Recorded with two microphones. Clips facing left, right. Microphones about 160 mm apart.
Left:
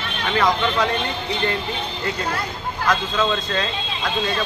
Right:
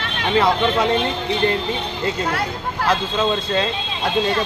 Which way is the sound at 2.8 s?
30° right (ahead or behind).